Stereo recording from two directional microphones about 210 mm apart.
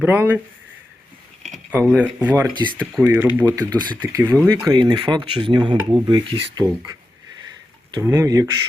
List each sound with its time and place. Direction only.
0.0 s speech: 10° right (ahead or behind)
1.4 s speech: centre (ahead or behind)
2.5 s speech: 20° right (ahead or behind)
3.0 s speech: 10° right (ahead or behind)
7.9 s speech: 15° right (ahead or behind)